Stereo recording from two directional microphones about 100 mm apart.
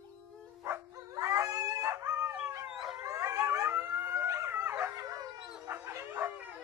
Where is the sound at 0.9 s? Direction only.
35° right (ahead or behind).